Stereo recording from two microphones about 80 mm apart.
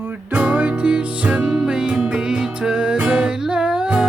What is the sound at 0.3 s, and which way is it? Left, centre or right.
Music, centre.